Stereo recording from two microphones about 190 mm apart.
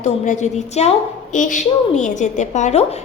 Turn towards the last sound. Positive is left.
turn(degrees=35)  # may be behind; listen again after turning